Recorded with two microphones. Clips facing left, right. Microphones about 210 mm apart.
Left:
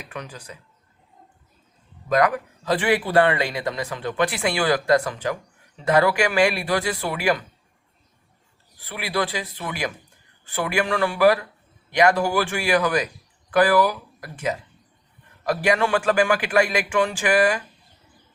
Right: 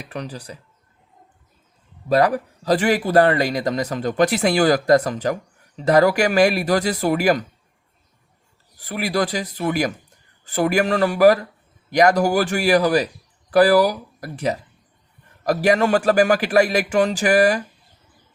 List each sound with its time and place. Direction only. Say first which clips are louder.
0.0 s a man's voice: right 5 dB; 35° right (ahead or behind)
2.0 s a man's voice: right 3 dB; 35° right (ahead or behind)
8.8 s a man's voice: right 4 dB; 45° right (ahead or behind)